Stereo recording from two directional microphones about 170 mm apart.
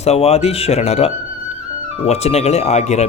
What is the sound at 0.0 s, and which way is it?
Speech, 35° left (ahead or behind).